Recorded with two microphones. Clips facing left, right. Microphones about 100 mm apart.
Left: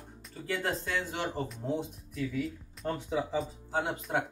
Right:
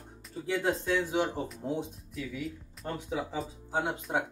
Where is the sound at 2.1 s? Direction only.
Centre (ahead or behind).